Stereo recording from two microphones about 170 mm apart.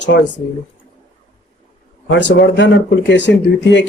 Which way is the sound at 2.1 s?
90° left.